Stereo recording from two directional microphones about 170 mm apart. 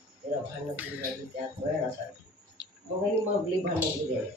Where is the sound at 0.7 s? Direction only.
10° right (ahead or behind).